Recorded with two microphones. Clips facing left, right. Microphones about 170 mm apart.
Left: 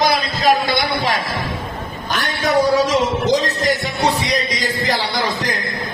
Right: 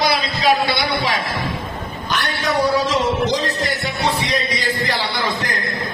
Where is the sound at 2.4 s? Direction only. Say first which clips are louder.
Left 4 dB; 45° left (ahead or behind).